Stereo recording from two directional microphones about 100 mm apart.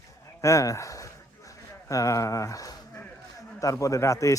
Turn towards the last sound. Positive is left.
turn(degrees=30)  # may be behind; listen again after turning